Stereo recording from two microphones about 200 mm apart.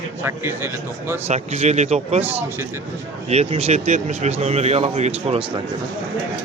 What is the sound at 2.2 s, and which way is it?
Speech, 10° right (ahead or behind).